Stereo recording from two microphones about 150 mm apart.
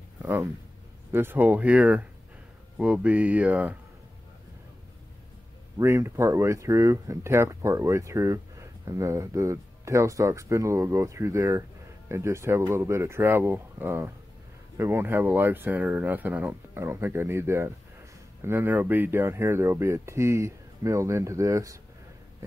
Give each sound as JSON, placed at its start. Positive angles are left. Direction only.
{"t": 0.2, "sound": "speech", "side_deg": -15}
{"t": 5.8, "sound": "speech", "side_deg": -20}